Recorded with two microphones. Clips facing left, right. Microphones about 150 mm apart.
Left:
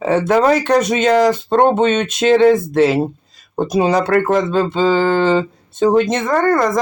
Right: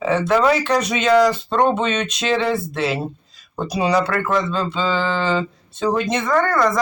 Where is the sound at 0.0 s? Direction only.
45° left (ahead or behind).